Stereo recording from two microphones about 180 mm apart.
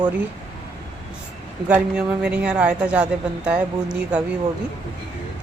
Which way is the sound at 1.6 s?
10° right (ahead or behind).